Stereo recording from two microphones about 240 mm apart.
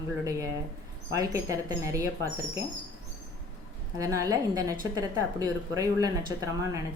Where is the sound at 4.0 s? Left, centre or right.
Centre.